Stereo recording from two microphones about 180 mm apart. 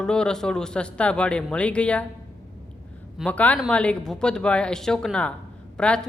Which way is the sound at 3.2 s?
5° left (ahead or behind).